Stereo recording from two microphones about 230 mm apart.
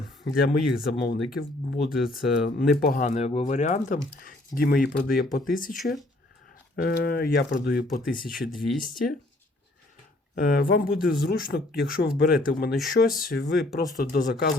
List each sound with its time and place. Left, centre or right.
0.3 s speech: left
5.8 s speech: centre
6.8 s speech: left
8.5 s speech: centre
10.3 s speech: left